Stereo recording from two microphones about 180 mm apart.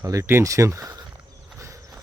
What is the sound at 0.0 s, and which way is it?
Speech, 15° right (ahead or behind).